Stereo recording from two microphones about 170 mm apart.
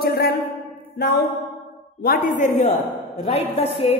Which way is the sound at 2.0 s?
55° left (ahead or behind).